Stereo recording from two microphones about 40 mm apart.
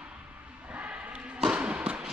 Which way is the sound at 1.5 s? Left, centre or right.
Right.